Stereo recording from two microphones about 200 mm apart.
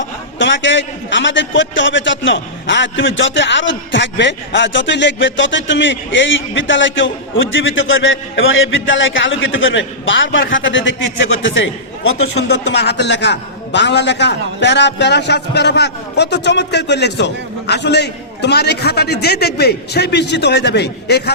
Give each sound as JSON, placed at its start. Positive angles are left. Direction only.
{"t": 0.3, "sound": "a man's voice", "side_deg": 65}